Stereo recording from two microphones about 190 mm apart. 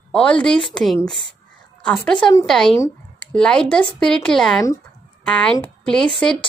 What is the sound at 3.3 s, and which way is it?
Speech, 5° left (ahead or behind).